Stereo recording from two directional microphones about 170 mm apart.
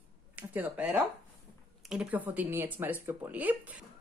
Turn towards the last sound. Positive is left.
turn(degrees=-10)  # may be behind; listen again after turning